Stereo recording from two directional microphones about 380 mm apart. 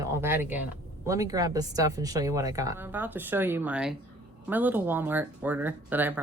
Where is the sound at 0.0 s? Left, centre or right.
Centre.